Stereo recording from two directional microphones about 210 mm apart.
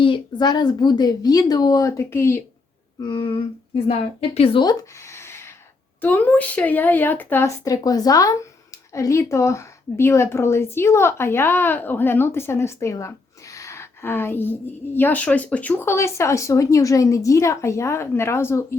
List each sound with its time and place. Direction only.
0.0 s a woman's voice: 20° left (ahead or behind)
3.0 s a woman's voice: 20° left (ahead or behind)